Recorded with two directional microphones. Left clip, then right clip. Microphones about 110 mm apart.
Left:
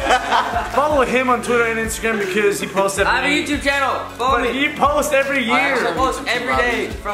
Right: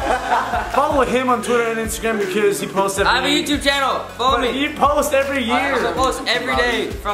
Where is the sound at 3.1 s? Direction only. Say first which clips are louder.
Even; 15° right (ahead or behind).